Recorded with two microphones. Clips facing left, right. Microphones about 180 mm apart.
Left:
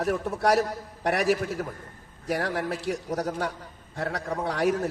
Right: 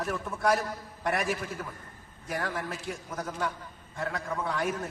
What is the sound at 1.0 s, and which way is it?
Speech, 70° left (ahead or behind).